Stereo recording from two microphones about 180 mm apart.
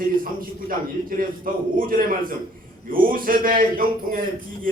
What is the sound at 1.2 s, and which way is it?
A man's voice, 50° right (ahead or behind).